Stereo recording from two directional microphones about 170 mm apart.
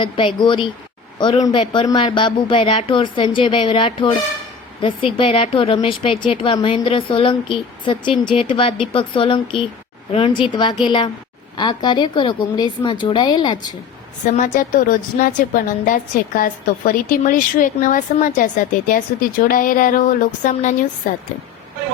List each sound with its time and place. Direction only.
0.0 s a woman's voice: 30° left (ahead or behind)
14.3 s a woman's voice: 45° left (ahead or behind)